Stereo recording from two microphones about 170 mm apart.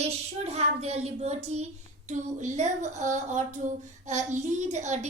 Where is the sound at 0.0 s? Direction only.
40° right (ahead or behind).